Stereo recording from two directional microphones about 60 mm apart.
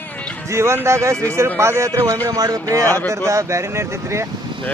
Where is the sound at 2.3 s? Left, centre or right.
Right.